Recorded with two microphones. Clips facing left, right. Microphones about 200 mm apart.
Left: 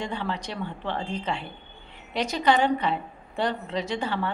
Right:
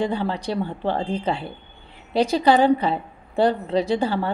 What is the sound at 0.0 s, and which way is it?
A woman's voice, 35° right (ahead or behind).